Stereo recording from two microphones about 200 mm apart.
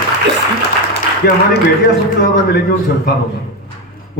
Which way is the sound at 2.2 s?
50° left (ahead or behind).